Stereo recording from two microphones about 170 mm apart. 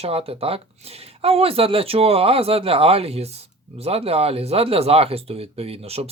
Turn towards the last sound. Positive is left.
turn(degrees=-35)  # may be behind; listen again after turning